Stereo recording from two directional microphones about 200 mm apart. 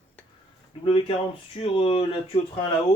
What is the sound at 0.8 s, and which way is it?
Speech, 30° left (ahead or behind).